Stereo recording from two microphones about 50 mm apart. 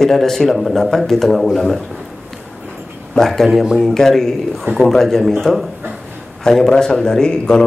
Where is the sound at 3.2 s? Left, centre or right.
Centre.